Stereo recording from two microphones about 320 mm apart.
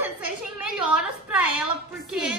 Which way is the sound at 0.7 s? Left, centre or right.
Centre.